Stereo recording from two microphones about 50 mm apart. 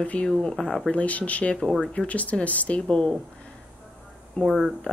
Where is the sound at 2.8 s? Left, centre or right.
Centre.